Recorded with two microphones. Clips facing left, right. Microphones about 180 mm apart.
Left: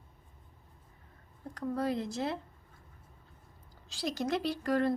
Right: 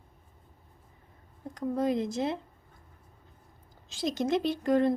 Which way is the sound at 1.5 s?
20° right (ahead or behind).